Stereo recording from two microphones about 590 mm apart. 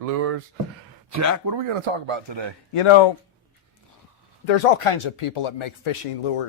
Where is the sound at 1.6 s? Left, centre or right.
Right.